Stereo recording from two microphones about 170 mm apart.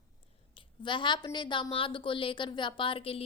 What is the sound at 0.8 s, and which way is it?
A woman's voice, 30° left (ahead or behind).